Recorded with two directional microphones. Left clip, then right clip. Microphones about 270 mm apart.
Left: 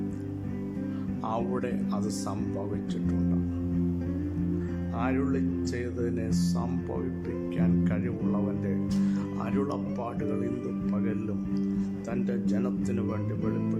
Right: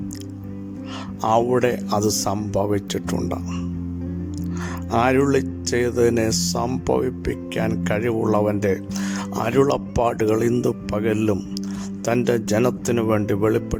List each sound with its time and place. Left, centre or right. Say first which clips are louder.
1.2 s speech: right 14 dB; right
4.9 s speech: right 13 dB; right